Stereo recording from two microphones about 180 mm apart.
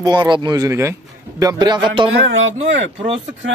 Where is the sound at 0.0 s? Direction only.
20° right (ahead or behind).